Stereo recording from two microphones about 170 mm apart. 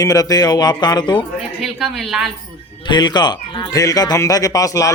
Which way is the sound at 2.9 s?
25° left (ahead or behind).